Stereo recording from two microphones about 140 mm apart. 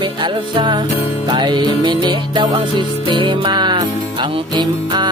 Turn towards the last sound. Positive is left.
turn(degrees=-30)  # may be behind; listen again after turning